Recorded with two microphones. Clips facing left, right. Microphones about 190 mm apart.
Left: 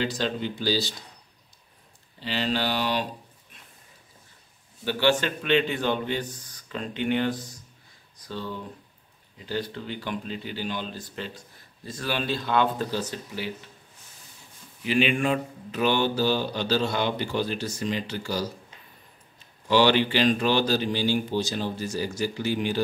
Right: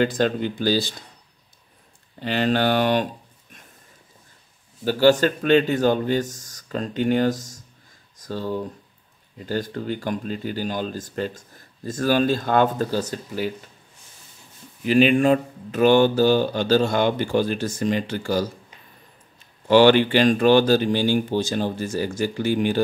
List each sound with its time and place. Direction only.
0.0 s speech: 50° right (ahead or behind)
2.1 s speech: 55° right (ahead or behind)
4.8 s a man's voice: 40° right (ahead or behind)
14.9 s speech: 40° right (ahead or behind)
19.7 s speech: 50° right (ahead or behind)